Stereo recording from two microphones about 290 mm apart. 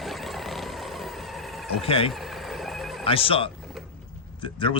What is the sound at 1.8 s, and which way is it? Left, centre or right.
Speech, centre.